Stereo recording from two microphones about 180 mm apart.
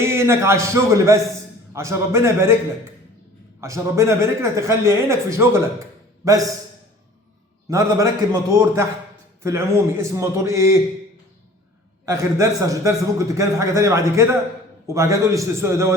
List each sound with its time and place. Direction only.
0.0 s a man's voice: 15° right (ahead or behind)
3.6 s a man's voice: 15° right (ahead or behind)
7.7 s a man's voice: 20° right (ahead or behind)
12.0 s a man's voice: 20° right (ahead or behind)